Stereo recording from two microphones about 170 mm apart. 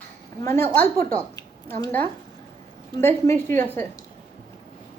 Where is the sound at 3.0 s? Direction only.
15° left (ahead or behind).